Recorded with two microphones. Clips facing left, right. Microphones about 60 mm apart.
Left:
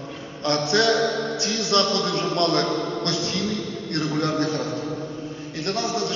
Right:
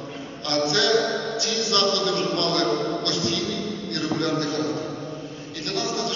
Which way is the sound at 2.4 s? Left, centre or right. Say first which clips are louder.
Left 1 dB; left.